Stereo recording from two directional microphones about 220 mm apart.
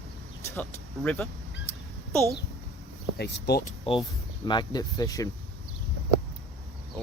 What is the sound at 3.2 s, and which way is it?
Speech, 45° left (ahead or behind).